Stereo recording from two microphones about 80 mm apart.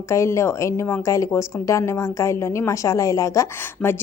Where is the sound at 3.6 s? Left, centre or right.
Left.